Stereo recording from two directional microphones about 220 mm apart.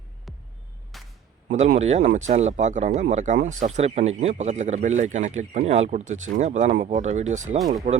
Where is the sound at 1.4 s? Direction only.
35° right (ahead or behind).